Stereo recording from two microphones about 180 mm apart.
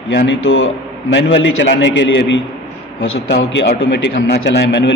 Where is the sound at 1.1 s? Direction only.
90° left.